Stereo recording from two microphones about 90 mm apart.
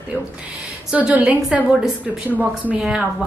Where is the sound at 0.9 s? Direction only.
15° right (ahead or behind).